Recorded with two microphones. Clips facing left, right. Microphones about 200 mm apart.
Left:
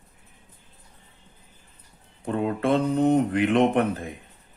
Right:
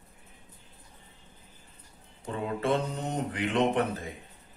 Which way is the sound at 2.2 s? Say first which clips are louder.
Left 6 dB; 55° left (ahead or behind).